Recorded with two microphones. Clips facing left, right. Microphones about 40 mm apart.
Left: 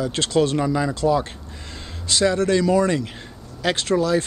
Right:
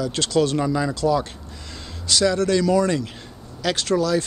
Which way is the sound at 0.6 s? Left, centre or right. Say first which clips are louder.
Left 1 dB; centre.